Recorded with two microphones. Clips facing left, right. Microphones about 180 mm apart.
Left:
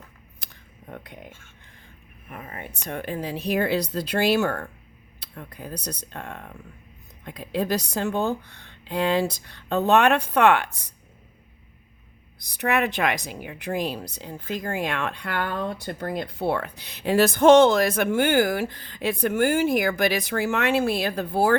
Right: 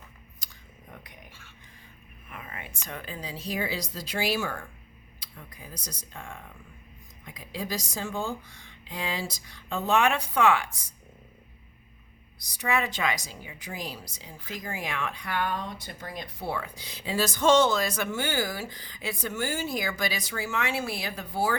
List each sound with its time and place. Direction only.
0.3 s a sound: 60° left (ahead or behind)
2.3 s speech: 45° left (ahead or behind)
3.0 s a woman's voice: 60° left (ahead or behind)
12.4 s a woman's voice: 60° left (ahead or behind)